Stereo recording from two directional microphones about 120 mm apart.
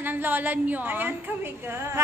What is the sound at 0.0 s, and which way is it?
A woman's voice, 15° right (ahead or behind).